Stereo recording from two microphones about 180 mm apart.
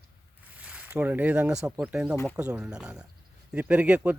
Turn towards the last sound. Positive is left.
turn(degrees=-10)  # may be behind; listen again after turning